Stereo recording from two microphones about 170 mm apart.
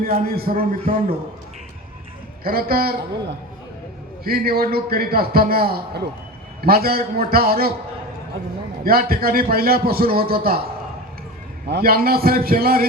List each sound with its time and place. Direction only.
0.0 s a man's voice: 60° right (ahead or behind)
2.4 s a man's voice: 60° right (ahead or behind)
8.8 s a man's voice: 60° right (ahead or behind)
11.7 s a man's voice: 60° right (ahead or behind)